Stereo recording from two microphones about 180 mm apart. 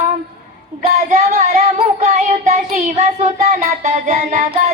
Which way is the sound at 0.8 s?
40° right (ahead or behind).